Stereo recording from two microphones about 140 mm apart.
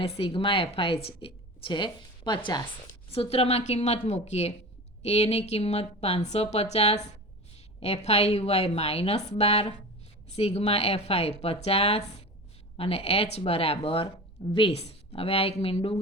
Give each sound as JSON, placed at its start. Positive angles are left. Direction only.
{"t": 0.2, "sound": "a woman's voice", "side_deg": 40}
{"t": 3.2, "sound": "speech", "side_deg": 45}